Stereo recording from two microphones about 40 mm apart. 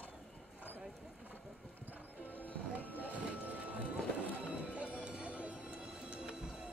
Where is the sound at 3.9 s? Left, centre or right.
Right.